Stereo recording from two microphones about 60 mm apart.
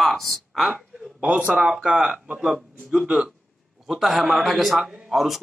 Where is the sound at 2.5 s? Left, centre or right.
Centre.